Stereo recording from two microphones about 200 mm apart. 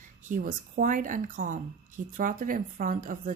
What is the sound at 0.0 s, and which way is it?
A woman's voice, 40° right (ahead or behind).